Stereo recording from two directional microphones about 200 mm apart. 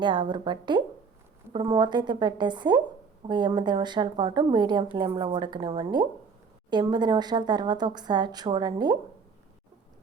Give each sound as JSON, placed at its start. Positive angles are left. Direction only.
{"t": 0.0, "sound": "a woman's voice", "side_deg": -20}